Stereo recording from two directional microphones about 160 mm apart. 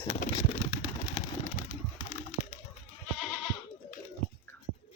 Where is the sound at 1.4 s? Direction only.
50° left (ahead or behind).